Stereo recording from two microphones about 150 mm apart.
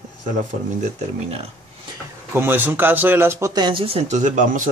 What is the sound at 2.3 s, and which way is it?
Speech, 15° right (ahead or behind).